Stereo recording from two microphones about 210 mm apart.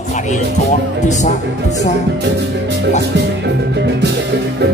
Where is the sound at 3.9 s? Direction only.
55° right (ahead or behind).